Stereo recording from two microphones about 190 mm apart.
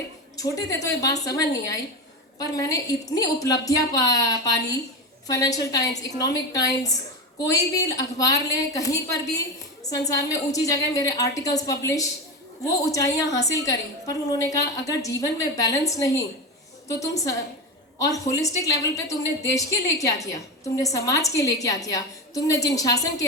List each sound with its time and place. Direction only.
0.3 s a woman's voice: 20° left (ahead or behind)
17.0 s a woman's voice: 15° left (ahead or behind)